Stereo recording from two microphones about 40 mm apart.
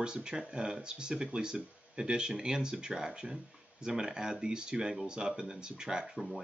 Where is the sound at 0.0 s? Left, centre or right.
Right.